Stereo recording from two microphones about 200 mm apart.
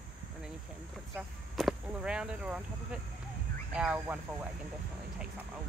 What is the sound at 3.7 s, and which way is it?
Speech, 5° right (ahead or behind).